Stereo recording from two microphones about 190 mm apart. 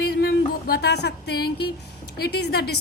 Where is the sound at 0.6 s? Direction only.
55° left (ahead or behind).